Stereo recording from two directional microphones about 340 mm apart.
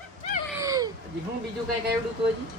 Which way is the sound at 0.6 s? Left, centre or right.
Centre.